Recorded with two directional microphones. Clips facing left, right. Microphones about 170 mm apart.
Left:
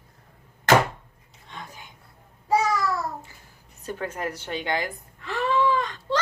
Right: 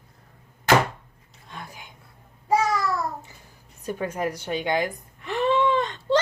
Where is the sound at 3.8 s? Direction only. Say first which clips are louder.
Right 3 dB; 15° right (ahead or behind).